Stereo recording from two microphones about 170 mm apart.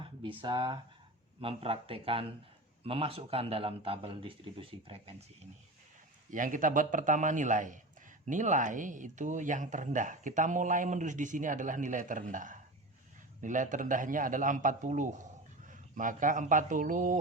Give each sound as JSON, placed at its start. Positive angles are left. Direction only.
{"t": 0.0, "sound": "a man's voice", "side_deg": -30}
{"t": 6.3, "sound": "speech", "side_deg": -50}